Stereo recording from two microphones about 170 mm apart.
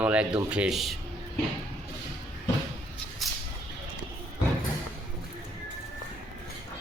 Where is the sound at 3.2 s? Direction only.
Centre (ahead or behind).